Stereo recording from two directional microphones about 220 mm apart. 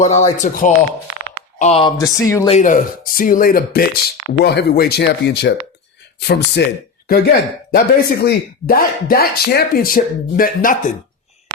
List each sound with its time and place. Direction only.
0.0 s speech: 30° left (ahead or behind)
2.0 s speech: 15° left (ahead or behind)
2.5 s speech: 35° left (ahead or behind)